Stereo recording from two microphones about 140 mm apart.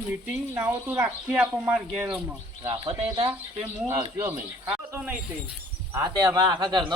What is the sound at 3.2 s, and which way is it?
Speech, 20° right (ahead or behind).